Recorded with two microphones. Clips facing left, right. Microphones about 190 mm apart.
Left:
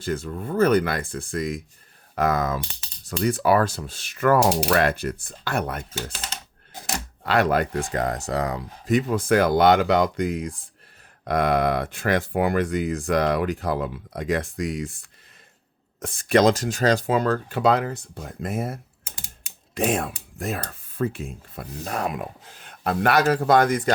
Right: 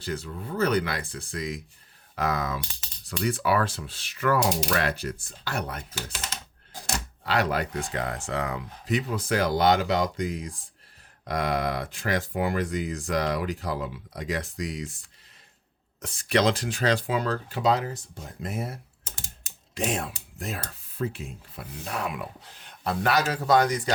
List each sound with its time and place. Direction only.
0.0 s speech: 50° left (ahead or behind)
7.3 s speech: 50° left (ahead or behind)
16.0 s speech: 50° left (ahead or behind)